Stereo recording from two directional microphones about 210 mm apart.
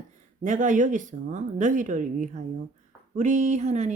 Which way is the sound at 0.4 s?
35° right (ahead or behind).